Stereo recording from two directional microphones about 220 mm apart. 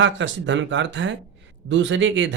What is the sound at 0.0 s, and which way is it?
A man's voice, 55° right (ahead or behind).